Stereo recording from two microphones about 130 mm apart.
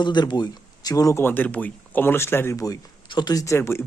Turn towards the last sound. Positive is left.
turn(degrees=20)  # may be behind; listen again after turning